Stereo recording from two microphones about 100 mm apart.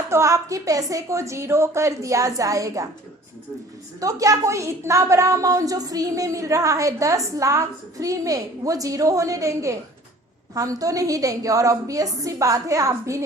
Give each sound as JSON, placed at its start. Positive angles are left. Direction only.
{"t": 0.1, "sound": "a woman's voice", "side_deg": -30}
{"t": 4.0, "sound": "a woman's voice", "side_deg": -35}